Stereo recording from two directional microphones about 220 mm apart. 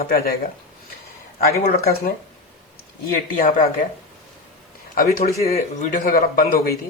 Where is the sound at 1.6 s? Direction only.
40° left (ahead or behind).